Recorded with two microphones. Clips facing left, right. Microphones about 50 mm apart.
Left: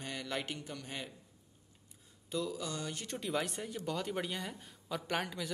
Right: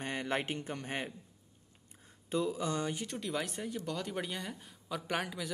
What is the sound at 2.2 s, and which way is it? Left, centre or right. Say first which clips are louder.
Speech: right 4 dB; right.